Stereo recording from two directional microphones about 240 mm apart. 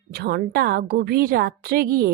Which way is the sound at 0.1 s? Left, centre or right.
Right.